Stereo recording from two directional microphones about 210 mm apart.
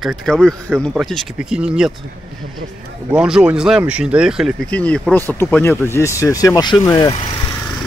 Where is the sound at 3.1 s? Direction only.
5° right (ahead or behind); by 7.1 s 20° left (ahead or behind).